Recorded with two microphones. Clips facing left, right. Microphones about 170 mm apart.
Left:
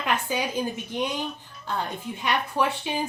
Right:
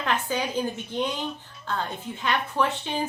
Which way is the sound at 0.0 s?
10° left (ahead or behind).